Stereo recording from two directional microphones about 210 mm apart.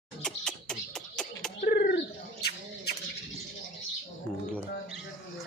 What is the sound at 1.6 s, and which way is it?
Bird, 55° left (ahead or behind).